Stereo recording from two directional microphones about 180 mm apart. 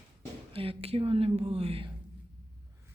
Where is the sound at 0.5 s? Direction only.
30° right (ahead or behind).